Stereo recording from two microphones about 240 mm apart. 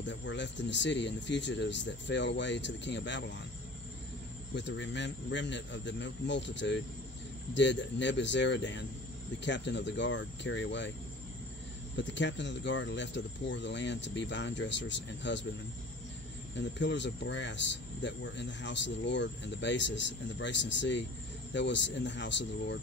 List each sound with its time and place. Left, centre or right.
0.0 s speech: left
4.6 s speech: left
12.0 s speech: left
16.5 s speech: left